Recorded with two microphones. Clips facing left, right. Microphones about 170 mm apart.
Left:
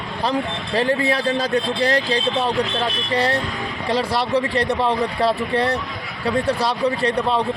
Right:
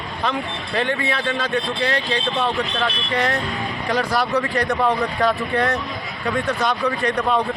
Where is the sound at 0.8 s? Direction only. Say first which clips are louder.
Left 3 dB; 35° left (ahead or behind).